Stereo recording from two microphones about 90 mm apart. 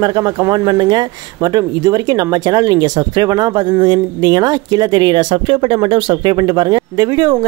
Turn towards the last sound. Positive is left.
turn(degrees=-45)  # may be behind; listen again after turning